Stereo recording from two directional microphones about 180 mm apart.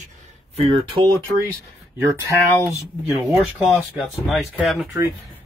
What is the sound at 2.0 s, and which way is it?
Speech, 15° right (ahead or behind).